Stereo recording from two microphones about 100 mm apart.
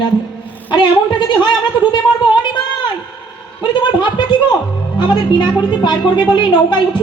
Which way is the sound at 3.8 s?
50° left (ahead or behind).